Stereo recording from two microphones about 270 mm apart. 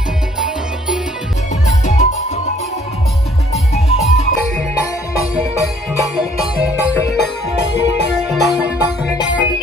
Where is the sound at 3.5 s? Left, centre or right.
Left.